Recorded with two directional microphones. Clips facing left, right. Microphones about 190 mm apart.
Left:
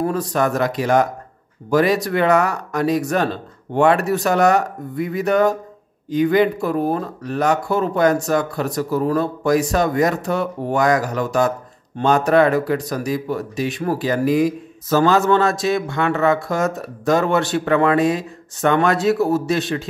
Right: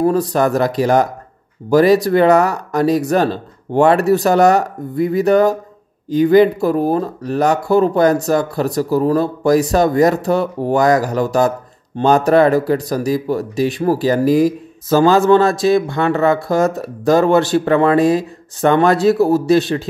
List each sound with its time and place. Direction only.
0.0 s speech: 35° right (ahead or behind)